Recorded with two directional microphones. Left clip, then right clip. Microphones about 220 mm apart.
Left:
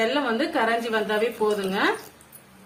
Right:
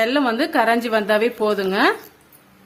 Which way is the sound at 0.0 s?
50° right (ahead or behind).